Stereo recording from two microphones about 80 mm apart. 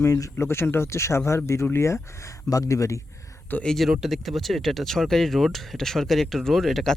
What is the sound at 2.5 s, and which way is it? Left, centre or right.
Speech, left.